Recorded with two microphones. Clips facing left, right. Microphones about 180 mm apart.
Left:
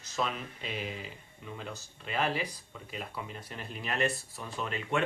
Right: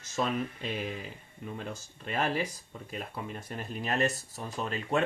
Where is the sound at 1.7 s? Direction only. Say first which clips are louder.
Right 2 dB; 45° right (ahead or behind).